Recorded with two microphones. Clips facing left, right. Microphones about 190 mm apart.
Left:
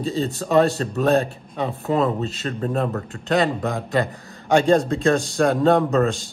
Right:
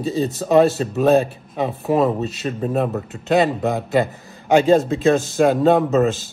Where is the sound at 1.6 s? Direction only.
20° right (ahead or behind).